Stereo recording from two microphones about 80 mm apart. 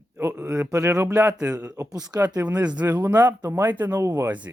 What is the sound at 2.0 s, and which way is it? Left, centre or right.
Speech, right.